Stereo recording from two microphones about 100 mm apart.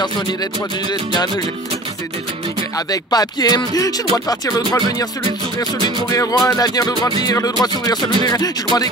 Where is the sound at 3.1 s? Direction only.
40° left (ahead or behind).